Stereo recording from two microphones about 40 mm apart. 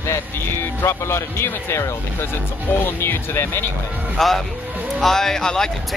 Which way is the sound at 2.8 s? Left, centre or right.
Left.